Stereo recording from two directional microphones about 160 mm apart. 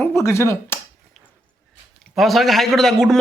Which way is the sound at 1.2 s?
Centre (ahead or behind).